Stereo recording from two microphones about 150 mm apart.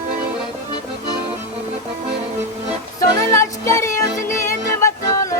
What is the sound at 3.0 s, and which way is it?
Music, 20° left (ahead or behind).